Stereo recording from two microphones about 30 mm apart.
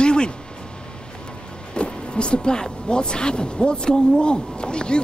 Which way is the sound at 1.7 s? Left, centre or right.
Left.